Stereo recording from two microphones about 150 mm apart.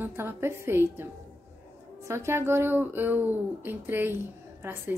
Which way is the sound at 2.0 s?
20° right (ahead or behind).